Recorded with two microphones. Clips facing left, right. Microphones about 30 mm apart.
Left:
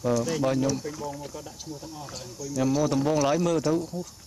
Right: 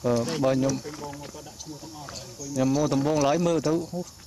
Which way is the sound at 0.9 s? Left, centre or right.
Right.